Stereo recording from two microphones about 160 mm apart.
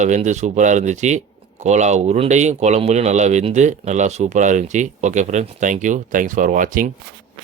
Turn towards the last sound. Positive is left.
turn(degrees=-55)  # may be behind; listen again after turning